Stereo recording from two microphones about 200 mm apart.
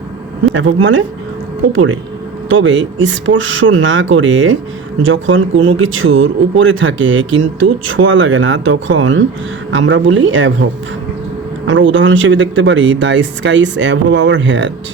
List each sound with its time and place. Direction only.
0.5 s speech: 75° right (ahead or behind)
1.7 s speech: 85° right
2.5 s speech: 70° right (ahead or behind)